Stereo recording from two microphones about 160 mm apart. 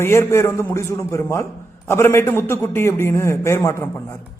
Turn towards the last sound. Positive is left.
turn(degrees=20)  # may be behind; listen again after turning